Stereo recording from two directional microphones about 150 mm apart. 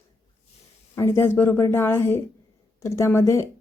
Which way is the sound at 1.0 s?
15° left (ahead or behind).